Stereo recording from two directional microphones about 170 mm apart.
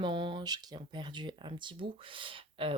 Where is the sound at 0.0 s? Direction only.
30° right (ahead or behind).